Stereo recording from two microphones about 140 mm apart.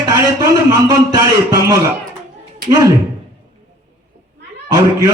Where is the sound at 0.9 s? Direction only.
30° right (ahead or behind).